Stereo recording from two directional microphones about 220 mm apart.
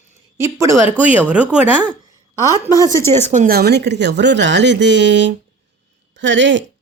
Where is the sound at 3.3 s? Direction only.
35° right (ahead or behind); by 6.6 s 55° right (ahead or behind).